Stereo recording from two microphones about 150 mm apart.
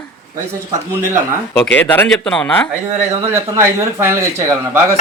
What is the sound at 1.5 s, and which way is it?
Speech, 10° left (ahead or behind).